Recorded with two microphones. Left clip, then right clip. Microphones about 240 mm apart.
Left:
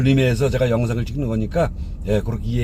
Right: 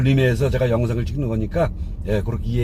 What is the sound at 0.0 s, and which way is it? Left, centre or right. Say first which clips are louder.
Speech: left 1 dB; left.